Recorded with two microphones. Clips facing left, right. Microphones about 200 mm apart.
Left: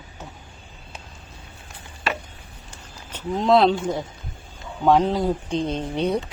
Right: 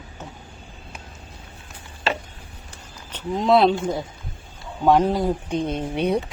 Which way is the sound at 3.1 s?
Centre (ahead or behind).